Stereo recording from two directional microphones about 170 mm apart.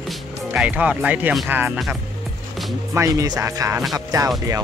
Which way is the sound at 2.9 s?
20° right (ahead or behind).